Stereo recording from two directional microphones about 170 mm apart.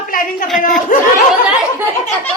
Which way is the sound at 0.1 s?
55° left (ahead or behind).